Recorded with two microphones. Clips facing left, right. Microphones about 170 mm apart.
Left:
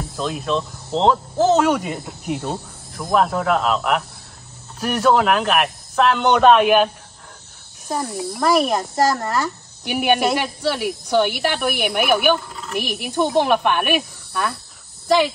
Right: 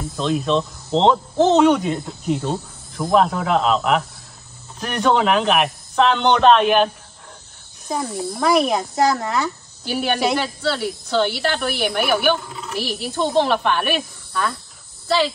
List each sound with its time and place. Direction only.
0.1 s speech: 5° left (ahead or behind)
8.0 s speech: centre (ahead or behind)
9.8 s speech: 15° left (ahead or behind)